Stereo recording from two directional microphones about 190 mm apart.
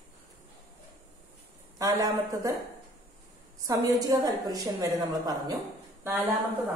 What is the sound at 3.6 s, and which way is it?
A woman's voice, 20° right (ahead or behind).